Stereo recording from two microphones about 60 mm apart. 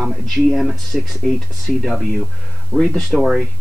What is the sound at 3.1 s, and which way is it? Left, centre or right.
Speech, centre.